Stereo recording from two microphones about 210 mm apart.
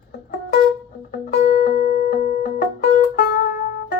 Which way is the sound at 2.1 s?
35° left (ahead or behind).